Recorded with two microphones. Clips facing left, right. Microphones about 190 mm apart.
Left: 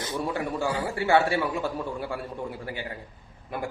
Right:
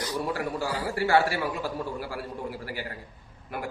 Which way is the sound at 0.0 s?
25° left (ahead or behind).